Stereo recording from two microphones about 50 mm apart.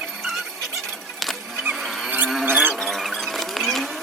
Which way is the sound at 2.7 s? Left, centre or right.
Centre.